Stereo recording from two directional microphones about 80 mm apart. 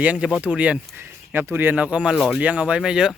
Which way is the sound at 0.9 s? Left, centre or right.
Right.